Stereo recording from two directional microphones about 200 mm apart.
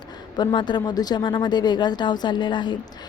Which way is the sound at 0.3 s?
20° left (ahead or behind).